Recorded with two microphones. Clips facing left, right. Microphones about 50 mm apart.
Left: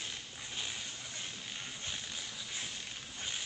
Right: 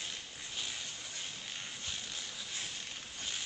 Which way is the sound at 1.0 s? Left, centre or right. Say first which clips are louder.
Even; centre.